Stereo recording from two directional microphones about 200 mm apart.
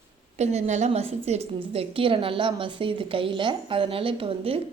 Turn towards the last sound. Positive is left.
turn(degrees=-30)  # may be behind; listen again after turning